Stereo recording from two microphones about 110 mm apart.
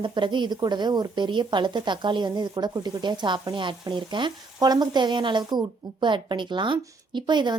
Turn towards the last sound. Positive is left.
turn(degrees=-45)  # may be behind; listen again after turning